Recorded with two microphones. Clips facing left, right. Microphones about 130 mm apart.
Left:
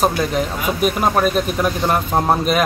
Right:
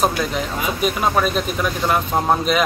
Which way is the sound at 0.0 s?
Centre (ahead or behind).